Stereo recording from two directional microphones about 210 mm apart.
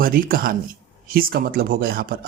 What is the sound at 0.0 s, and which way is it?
Speech, 45° right (ahead or behind).